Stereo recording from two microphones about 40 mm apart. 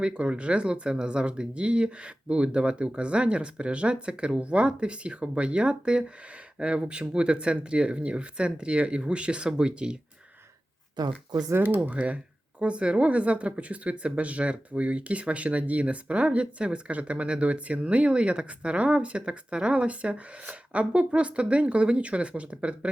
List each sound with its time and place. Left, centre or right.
0.0 s speech: right
11.7 s speech: right